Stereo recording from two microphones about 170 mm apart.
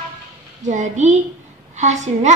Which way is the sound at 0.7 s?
45° right (ahead or behind).